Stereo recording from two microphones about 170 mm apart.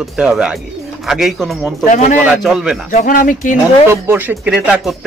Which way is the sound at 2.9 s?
50° left (ahead or behind).